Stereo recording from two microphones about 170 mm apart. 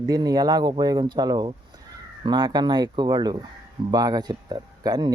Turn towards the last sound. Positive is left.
turn(degrees=-25)  # may be behind; listen again after turning